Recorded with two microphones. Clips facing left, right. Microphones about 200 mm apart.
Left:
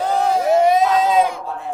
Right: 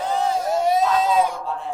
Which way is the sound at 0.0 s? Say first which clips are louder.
Left 4 dB; 75° left (ahead or behind).